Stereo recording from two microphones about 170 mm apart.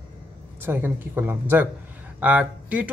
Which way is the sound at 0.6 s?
10° right (ahead or behind).